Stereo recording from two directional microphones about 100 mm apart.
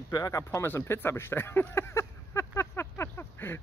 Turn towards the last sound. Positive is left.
turn(degrees=25)  # may be behind; listen again after turning